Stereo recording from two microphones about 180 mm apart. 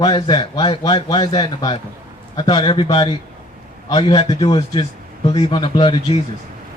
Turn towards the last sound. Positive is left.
turn(degrees=30)  # may be behind; listen again after turning